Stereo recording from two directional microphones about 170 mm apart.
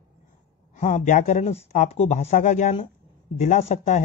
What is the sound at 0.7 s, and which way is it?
Speech, 45° left (ahead or behind).